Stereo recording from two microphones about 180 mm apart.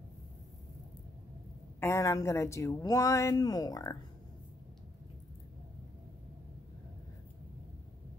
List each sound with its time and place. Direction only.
1.8 s speech: 15° left (ahead or behind)